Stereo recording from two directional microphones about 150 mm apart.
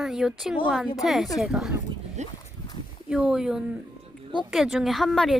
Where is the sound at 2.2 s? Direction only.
50° right (ahead or behind).